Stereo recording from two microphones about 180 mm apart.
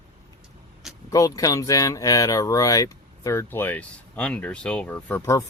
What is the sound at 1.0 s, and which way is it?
Speech, 20° left (ahead or behind).